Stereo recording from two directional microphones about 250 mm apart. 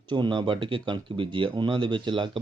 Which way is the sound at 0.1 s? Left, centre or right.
Centre.